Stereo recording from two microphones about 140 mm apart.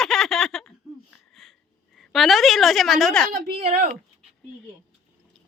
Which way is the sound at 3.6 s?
55° right (ahead or behind).